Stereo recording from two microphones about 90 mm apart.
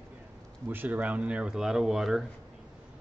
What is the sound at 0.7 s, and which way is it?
Speech, 20° right (ahead or behind).